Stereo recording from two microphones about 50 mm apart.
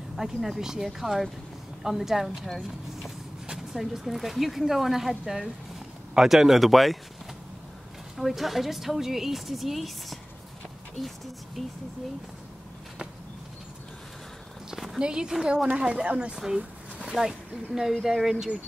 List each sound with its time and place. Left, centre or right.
0.1 s a woman's voice: centre
8.2 s speech: centre
14.7 s a sound: centre
15.0 s a woman's voice: centre